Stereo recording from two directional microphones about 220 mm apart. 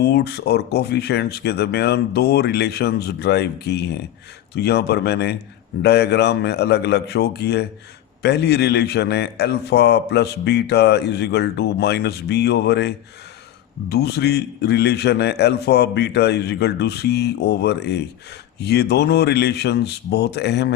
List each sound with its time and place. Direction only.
0.0 s a man's voice: 50° left (ahead or behind)
13.9 s a man's voice: 50° left (ahead or behind)